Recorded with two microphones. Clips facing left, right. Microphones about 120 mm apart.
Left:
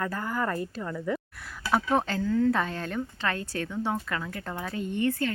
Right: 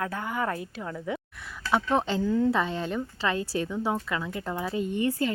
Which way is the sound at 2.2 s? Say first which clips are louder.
Even; 20° right (ahead or behind).